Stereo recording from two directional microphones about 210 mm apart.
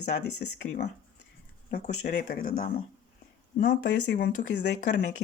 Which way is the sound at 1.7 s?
35° left (ahead or behind).